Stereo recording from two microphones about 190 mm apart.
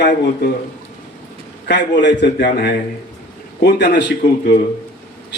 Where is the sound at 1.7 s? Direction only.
70° left (ahead or behind).